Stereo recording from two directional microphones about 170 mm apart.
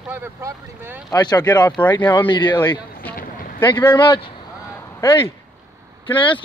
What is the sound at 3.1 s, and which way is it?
Boat, 55° left (ahead or behind).